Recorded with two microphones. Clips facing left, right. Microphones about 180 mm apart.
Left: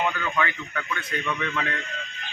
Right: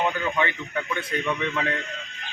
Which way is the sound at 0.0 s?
25° right (ahead or behind).